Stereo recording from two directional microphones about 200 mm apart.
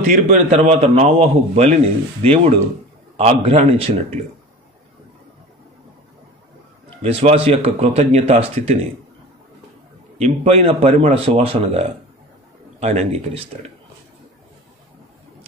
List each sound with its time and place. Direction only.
0.0 s speech: 40° right (ahead or behind)
7.0 s speech: 30° right (ahead or behind)
10.1 s speech: 30° right (ahead or behind)